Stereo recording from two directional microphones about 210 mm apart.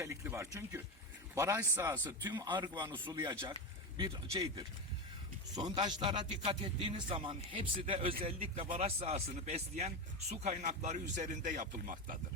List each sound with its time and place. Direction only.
0.0 s a man's voice: 15° right (ahead or behind); by 12.1 s 40° right (ahead or behind)